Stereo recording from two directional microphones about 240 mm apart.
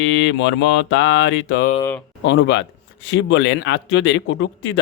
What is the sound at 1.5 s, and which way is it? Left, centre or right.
Speech, left.